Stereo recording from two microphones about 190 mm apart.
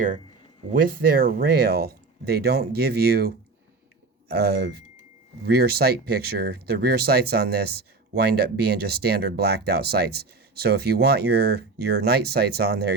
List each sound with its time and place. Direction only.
0.7 s speech: 50° right (ahead or behind)